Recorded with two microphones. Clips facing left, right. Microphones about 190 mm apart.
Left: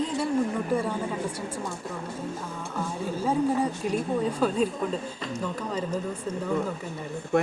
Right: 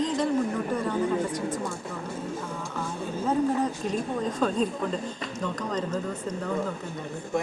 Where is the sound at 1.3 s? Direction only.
10° left (ahead or behind).